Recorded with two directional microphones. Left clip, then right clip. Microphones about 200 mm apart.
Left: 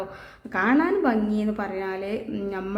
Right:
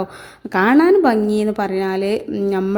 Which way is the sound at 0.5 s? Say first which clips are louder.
Right 9 dB; 40° right (ahead or behind).